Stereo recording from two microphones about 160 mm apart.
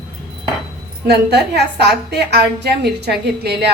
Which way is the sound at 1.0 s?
90° right.